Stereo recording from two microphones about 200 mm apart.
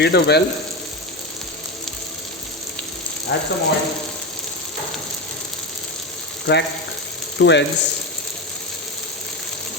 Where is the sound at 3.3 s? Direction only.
65° left (ahead or behind).